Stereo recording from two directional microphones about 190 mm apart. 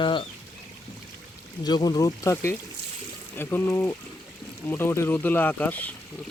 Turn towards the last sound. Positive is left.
turn(degrees=10)  # may be behind; listen again after turning